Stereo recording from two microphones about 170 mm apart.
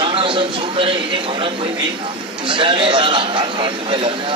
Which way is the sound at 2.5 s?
30° right (ahead or behind).